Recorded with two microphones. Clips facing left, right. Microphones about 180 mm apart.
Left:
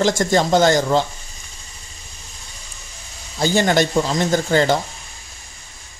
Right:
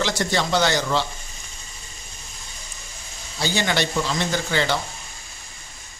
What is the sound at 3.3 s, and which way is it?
Speech, 45° left (ahead or behind).